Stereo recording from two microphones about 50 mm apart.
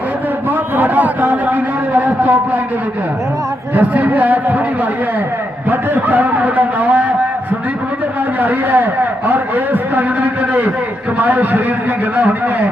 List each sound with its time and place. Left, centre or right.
0.8 s a sound: right
3.8 s a man's voice: right
5.7 s a man's voice: right
8.4 s a man's voice: right